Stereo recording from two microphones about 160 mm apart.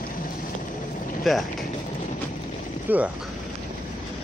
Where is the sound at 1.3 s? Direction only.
Centre (ahead or behind).